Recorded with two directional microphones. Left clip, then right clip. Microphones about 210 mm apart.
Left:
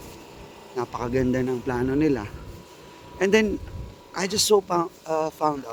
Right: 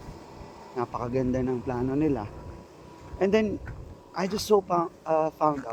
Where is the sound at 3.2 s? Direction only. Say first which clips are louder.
Left 4 dB; 40° left (ahead or behind).